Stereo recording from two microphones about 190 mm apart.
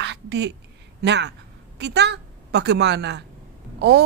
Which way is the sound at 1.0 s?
65° right (ahead or behind).